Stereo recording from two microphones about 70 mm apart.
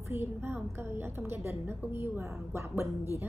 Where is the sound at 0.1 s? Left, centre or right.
Right.